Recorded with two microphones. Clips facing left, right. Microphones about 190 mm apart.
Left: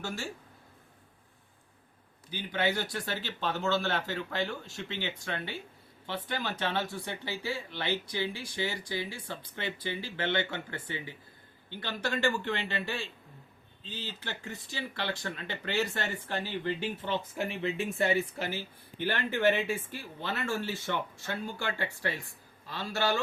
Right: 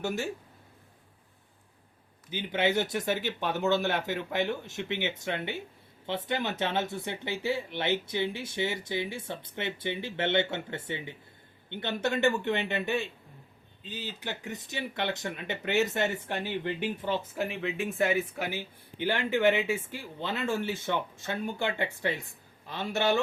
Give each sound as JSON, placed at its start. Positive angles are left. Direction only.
{"t": 2.3, "sound": "speech", "side_deg": -20}
{"t": 17.3, "sound": "speech", "side_deg": 0}
{"t": 18.9, "sound": "speech", "side_deg": -15}